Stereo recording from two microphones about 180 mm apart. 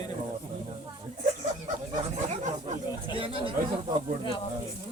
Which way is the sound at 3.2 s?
30° right (ahead or behind).